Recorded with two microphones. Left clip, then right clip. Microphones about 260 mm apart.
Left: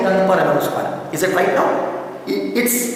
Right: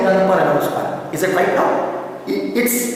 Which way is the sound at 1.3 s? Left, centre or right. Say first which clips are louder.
Even; centre.